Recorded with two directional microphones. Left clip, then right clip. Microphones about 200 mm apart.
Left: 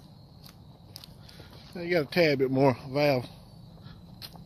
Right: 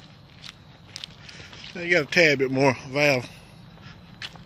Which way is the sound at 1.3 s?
5° right (ahead or behind).